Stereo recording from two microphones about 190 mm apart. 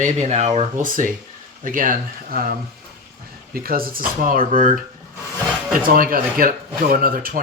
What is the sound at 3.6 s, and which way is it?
Speech, 50° right (ahead or behind).